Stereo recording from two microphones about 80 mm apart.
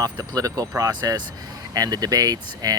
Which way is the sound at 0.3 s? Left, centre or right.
Right.